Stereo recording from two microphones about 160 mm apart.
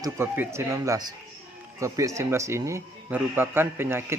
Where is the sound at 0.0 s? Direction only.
15° right (ahead or behind).